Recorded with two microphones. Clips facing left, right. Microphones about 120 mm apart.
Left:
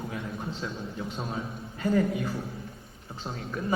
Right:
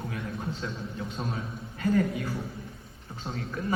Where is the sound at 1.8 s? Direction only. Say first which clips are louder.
Even; 25° left (ahead or behind).